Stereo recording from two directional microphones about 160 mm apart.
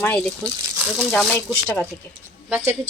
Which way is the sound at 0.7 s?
5° right (ahead or behind).